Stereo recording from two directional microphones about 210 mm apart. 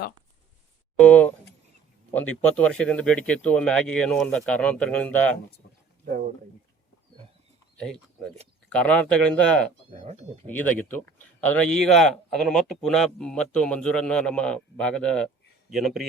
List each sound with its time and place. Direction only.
0.9 s speech: 5° left (ahead or behind)
7.8 s speech: 5° left (ahead or behind)
9.9 s speech: 30° right (ahead or behind)
10.4 s speech: 5° left (ahead or behind)